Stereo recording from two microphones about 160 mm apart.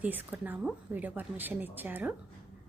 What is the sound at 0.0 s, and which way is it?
Speech, 10° right (ahead or behind).